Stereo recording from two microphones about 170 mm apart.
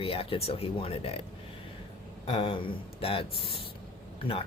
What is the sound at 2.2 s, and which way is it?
Speech, 30° left (ahead or behind).